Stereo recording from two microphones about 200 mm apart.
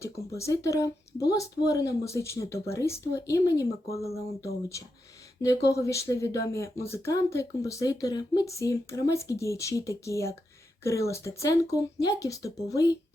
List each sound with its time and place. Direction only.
0.0 s speech: 15° left (ahead or behind)